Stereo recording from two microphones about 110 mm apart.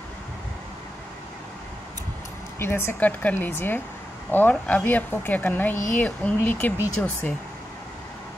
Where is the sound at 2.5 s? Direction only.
20° left (ahead or behind).